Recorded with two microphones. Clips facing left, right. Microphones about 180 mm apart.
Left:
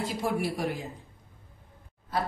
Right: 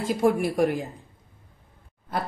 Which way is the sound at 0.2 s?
50° right (ahead or behind).